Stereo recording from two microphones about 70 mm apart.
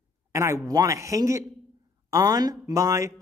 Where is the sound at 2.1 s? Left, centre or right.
Right.